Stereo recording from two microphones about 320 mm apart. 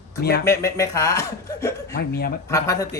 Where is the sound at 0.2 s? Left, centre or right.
Left.